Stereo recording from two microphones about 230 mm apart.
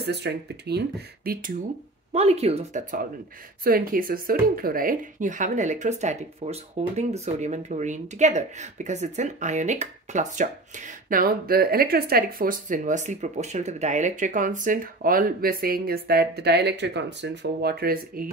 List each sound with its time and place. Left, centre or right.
0.0 s speech: right
2.1 s speech: right